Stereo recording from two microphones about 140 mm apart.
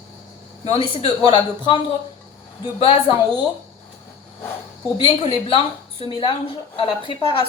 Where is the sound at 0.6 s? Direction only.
40° left (ahead or behind).